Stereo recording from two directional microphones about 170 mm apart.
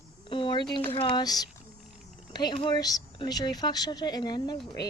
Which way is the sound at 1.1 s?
20° left (ahead or behind).